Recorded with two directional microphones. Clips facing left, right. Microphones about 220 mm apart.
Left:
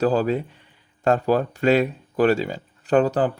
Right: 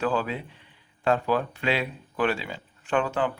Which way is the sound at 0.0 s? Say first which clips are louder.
Left 7 dB; 40° left (ahead or behind).